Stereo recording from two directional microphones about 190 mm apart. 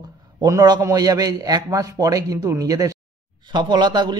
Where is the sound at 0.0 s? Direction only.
20° right (ahead or behind).